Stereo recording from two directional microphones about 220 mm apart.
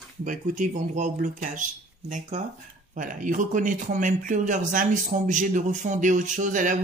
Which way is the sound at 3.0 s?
35° right (ahead or behind).